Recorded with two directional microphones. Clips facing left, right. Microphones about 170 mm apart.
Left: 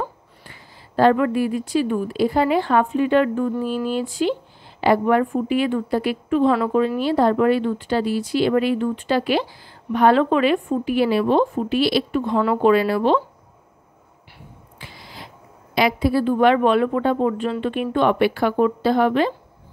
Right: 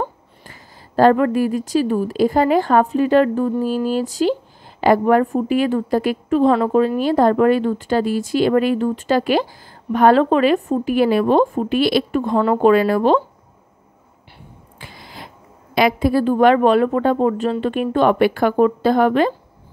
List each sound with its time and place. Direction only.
0.4 s a woman's voice: 40° right (ahead or behind)
14.8 s a sound: 50° right (ahead or behind)
15.7 s speech: 50° right (ahead or behind)